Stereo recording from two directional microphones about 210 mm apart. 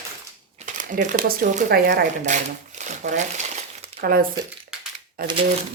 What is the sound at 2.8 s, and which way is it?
Crumpling, 35° right (ahead or behind).